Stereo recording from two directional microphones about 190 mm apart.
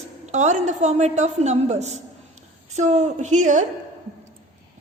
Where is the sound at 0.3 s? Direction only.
40° right (ahead or behind).